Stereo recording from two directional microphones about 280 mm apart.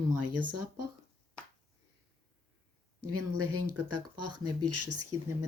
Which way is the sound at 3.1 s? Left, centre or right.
Right.